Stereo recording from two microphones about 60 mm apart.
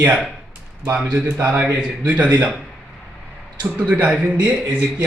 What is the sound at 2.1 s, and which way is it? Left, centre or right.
Speech, right.